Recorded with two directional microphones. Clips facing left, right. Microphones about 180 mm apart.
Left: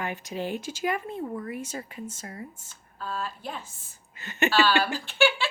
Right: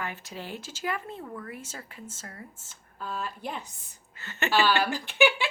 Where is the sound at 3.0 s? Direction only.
15° right (ahead or behind).